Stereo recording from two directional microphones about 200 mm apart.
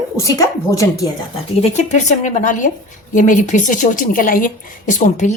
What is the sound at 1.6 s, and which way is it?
A woman's voice, 35° left (ahead or behind).